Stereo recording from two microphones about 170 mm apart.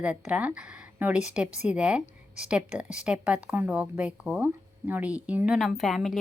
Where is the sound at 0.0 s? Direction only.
10° right (ahead or behind).